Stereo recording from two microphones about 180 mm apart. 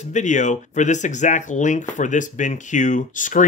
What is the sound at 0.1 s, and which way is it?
Speech, 40° left (ahead or behind).